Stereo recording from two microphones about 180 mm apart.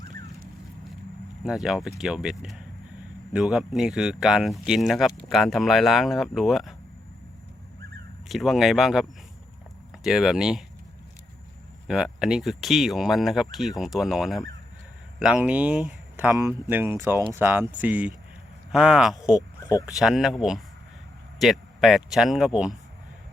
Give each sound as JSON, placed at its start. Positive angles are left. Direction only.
{"t": 1.5, "sound": "speech", "side_deg": 0}
{"t": 8.3, "sound": "speech", "side_deg": 0}
{"t": 11.9, "sound": "speech", "side_deg": -5}
{"t": 19.4, "sound": "a sound", "side_deg": 20}
{"t": 19.9, "sound": "speech", "side_deg": 0}